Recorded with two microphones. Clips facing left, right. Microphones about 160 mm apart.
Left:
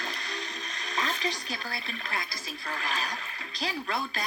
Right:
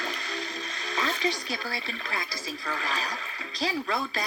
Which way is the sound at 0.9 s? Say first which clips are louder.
Right 2 dB; 35° right (ahead or behind).